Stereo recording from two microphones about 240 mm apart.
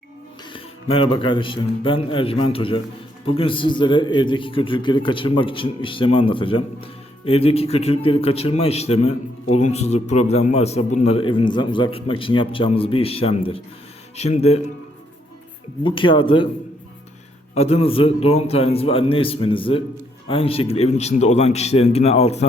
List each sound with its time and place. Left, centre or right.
0.5 s a man's voice: left
15.8 s a man's voice: left
17.5 s a man's voice: left